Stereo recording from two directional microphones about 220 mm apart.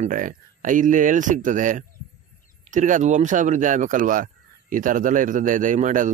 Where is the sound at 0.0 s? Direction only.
35° right (ahead or behind).